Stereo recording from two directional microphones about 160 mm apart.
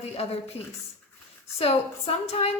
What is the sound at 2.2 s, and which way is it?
Speech, 40° left (ahead or behind).